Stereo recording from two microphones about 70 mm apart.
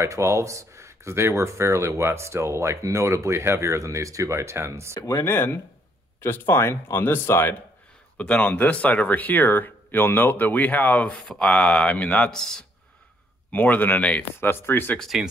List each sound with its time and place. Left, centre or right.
0.0 s speech: right
5.1 s speech: left
8.2 s speech: left
11.1 s speech: centre
12.3 s speech: centre
13.5 s speech: left
14.5 s speech: left
15.0 s speech: centre